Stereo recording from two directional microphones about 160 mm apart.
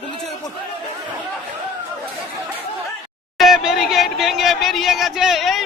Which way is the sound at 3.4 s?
Centre (ahead or behind).